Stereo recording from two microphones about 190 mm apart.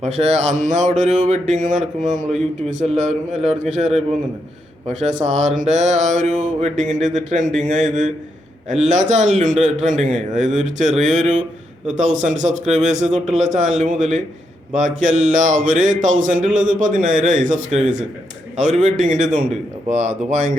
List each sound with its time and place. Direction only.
0.0 s speech: 35° right (ahead or behind)